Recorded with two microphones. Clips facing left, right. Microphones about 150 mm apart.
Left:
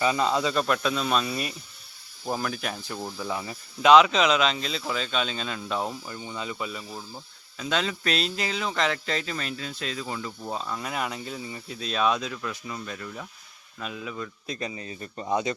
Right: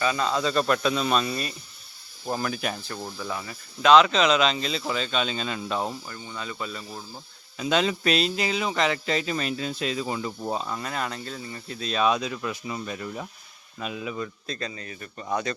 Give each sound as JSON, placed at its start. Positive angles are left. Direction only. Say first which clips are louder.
{"t": 0.0, "sound": "speech", "louder": "left 1 dB", "side_deg": 20}
{"t": 0.5, "sound": "speech", "louder": "right 2 dB", "side_deg": 0}
{"t": 2.9, "sound": "speech", "louder": "left 1 dB", "side_deg": 10}
{"t": 6.1, "sound": "speech", "louder": "left 2 dB", "side_deg": 15}
{"t": 7.6, "sound": "speech", "louder": "right 4 dB", "side_deg": -15}
{"t": 8.1, "sound": "speech", "louder": "right 4 dB", "side_deg": -5}
{"t": 9.2, "sound": "speech", "louder": "right 5 dB", "side_deg": -20}
{"t": 10.8, "sound": "speech", "louder": "even", "side_deg": 10}
{"t": 14.4, "sound": "speech", "louder": "left 1 dB", "side_deg": 15}